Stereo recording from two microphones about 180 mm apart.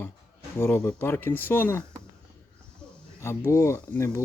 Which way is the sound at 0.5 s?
15° left (ahead or behind).